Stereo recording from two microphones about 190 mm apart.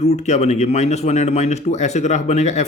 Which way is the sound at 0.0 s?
35° left (ahead or behind).